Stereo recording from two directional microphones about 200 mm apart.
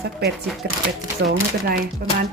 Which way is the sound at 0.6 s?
55° right (ahead or behind).